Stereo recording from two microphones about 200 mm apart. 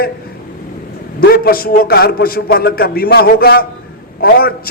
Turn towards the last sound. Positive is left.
turn(degrees=50)  # may be behind; listen again after turning